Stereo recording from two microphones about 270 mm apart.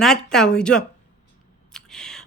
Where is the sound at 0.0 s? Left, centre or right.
Centre.